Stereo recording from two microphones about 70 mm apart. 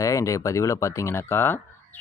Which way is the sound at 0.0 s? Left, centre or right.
Left.